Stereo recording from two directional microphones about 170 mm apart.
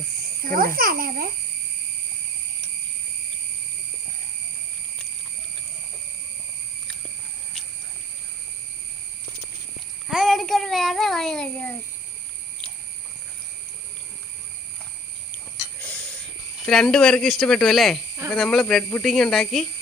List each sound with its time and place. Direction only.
0.4 s a child's voice: 55° right (ahead or behind)
10.1 s child singing: centre (ahead or behind)
16.6 s speech: 5° left (ahead or behind)